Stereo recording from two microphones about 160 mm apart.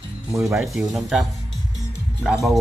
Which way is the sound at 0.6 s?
Centre (ahead or behind).